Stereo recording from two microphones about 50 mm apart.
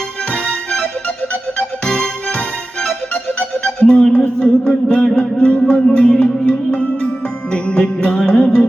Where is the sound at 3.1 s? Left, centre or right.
Left.